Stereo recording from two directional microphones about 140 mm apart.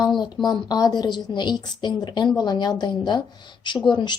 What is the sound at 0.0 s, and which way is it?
Speech, 30° left (ahead or behind).